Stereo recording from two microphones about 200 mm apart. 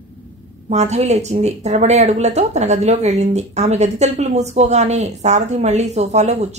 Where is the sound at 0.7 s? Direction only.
35° right (ahead or behind).